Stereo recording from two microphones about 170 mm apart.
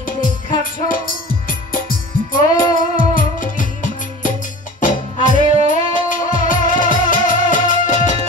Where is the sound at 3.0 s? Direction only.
50° left (ahead or behind).